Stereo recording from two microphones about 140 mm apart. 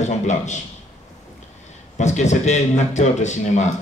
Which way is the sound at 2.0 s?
55° left (ahead or behind).